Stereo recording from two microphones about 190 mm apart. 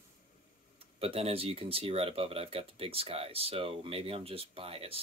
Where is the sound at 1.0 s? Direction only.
30° right (ahead or behind).